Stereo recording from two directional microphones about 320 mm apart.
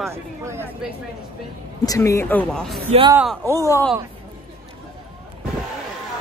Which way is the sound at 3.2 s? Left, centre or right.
Centre.